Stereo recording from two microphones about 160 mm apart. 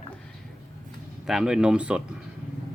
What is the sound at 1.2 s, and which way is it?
Speech, 5° right (ahead or behind).